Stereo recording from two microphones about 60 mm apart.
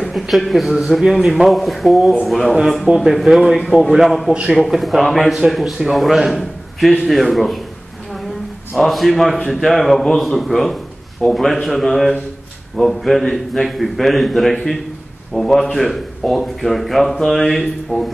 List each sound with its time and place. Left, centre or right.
0.0 s speech: centre
4.3 s a man's voice: centre
4.6 s speech: centre
8.7 s speech: centre